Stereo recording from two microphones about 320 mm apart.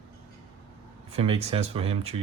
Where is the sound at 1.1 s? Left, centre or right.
Centre.